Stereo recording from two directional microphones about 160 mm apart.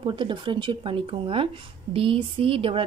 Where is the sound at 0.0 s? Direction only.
30° right (ahead or behind).